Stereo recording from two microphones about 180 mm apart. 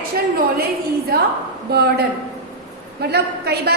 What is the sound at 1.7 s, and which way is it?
A woman's voice, 65° right (ahead or behind).